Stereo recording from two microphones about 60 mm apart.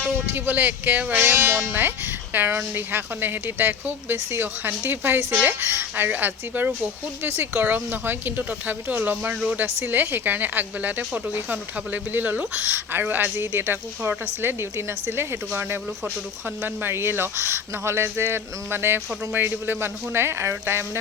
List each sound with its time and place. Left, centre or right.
0.3 s speech: right
1.2 s speech: right
6.1 s speech: right
9.6 s speech: right
9.9 s speech: right